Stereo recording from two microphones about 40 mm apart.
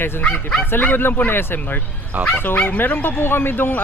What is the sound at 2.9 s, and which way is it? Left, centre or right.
Speech, left.